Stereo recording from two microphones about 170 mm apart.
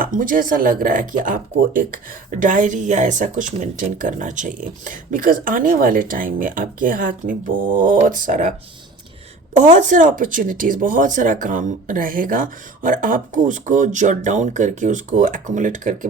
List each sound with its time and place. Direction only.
0.0 s speech: 55° right (ahead or behind)
9.6 s speech: 50° right (ahead or behind)